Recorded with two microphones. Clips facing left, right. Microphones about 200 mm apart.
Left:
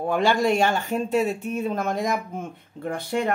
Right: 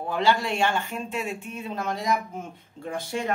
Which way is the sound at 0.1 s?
50° left (ahead or behind).